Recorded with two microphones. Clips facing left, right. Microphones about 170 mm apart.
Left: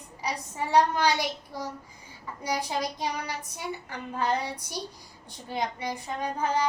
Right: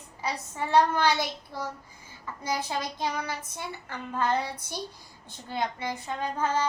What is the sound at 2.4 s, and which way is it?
Child singing, 15° left (ahead or behind).